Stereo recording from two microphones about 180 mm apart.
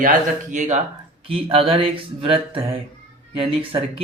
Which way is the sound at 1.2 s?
30° right (ahead or behind).